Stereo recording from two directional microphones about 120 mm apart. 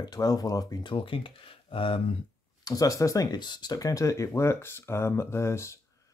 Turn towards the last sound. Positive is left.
turn(degrees=25)  # may be behind; listen again after turning